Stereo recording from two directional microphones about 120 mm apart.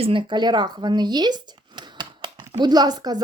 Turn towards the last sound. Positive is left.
turn(degrees=-35)  # may be behind; listen again after turning